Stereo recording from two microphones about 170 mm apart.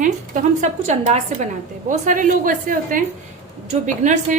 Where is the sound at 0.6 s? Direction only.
40° right (ahead or behind).